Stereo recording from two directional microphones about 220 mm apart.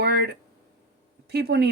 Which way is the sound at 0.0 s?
50° right (ahead or behind).